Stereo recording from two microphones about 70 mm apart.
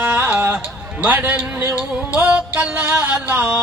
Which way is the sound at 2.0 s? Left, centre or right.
Centre.